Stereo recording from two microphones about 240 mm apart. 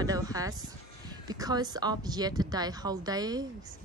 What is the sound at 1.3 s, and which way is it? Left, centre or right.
A woman's voice, centre.